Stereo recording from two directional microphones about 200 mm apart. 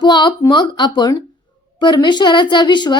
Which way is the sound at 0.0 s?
20° left (ahead or behind).